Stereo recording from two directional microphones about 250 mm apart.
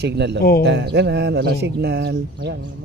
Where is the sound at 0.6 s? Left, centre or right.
Right.